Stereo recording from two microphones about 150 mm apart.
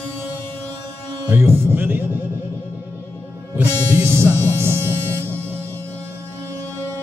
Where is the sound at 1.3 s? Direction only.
15° right (ahead or behind).